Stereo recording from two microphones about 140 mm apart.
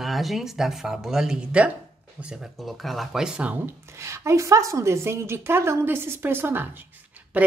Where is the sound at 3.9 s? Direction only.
20° right (ahead or behind).